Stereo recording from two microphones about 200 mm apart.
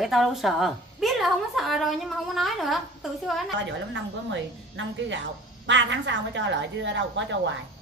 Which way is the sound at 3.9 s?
65° right (ahead or behind).